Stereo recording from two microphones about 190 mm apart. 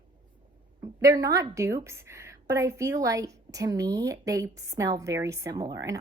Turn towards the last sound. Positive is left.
turn(degrees=-20)  # may be behind; listen again after turning